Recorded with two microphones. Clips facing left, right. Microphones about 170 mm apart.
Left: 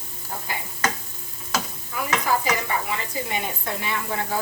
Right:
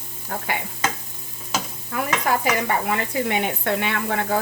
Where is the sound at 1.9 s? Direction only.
60° right (ahead or behind).